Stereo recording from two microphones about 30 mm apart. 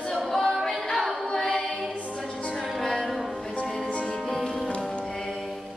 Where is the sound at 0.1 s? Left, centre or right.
Centre.